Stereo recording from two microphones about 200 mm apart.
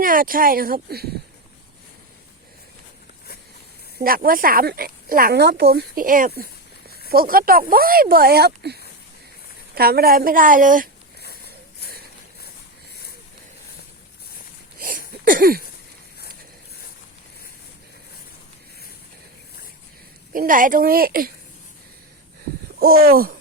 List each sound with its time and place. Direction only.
0.0 s speech: 45° right (ahead or behind)
3.9 s speech: 45° right (ahead or behind)
11.2 s a sound: 55° left (ahead or behind)
14.8 s a sound: 45° right (ahead or behind)
20.3 s speech: 45° right (ahead or behind)
22.8 s speech: 50° right (ahead or behind)